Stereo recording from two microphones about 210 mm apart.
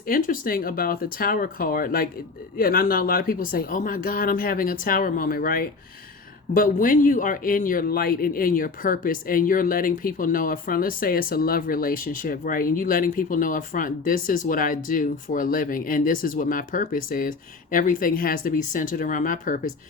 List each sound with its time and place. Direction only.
0.1 s speech: 45° left (ahead or behind)